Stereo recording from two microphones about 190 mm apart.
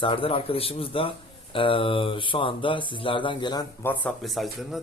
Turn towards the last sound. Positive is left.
turn(degrees=0)  # may be behind; listen again after turning